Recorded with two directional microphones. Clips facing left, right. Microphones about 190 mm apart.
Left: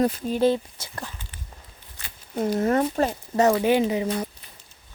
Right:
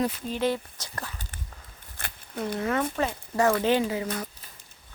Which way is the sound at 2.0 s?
55° right (ahead or behind).